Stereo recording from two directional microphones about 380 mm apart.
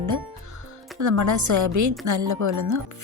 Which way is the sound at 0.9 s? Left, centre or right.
Right.